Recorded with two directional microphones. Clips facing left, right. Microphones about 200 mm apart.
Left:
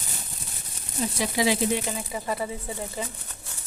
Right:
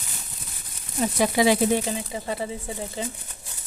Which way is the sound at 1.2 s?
55° right (ahead or behind).